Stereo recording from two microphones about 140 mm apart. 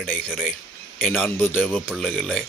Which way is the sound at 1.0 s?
10° left (ahead or behind).